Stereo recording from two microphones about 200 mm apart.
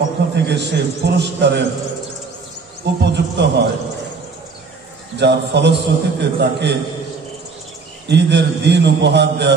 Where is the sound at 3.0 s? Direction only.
60° right (ahead or behind).